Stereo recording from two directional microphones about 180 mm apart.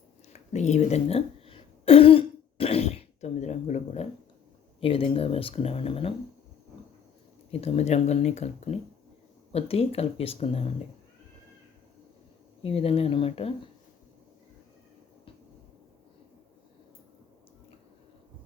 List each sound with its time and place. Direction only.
0.3 s a sound: 40° left (ahead or behind)
4.8 s speech: 30° left (ahead or behind)
7.5 s speech: 35° left (ahead or behind)
12.6 s speech: 35° left (ahead or behind)